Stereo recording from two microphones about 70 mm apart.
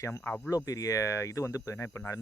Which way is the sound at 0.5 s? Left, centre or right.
Left.